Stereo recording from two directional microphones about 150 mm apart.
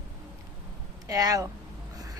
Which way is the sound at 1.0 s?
20° right (ahead or behind).